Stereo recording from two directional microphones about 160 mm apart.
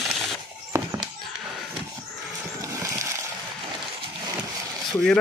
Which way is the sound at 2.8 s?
20° right (ahead or behind).